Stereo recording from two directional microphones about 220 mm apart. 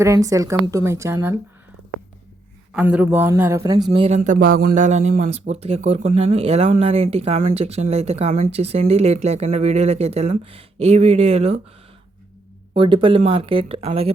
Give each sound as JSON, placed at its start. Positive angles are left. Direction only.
{"t": 0.0, "sound": "a woman's voice", "side_deg": -15}
{"t": 2.7, "sound": "speech", "side_deg": -5}
{"t": 12.7, "sound": "speech", "side_deg": -25}